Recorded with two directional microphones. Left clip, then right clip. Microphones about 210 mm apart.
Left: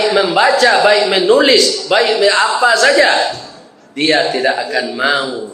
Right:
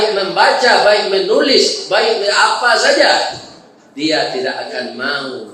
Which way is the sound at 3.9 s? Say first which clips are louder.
Left 3 dB; 50° left (ahead or behind).